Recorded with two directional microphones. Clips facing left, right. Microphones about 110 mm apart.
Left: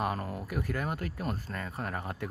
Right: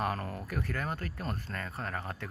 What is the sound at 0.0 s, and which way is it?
Speech, 10° left (ahead or behind).